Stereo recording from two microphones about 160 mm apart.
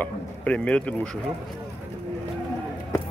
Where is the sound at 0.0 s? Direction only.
5° left (ahead or behind).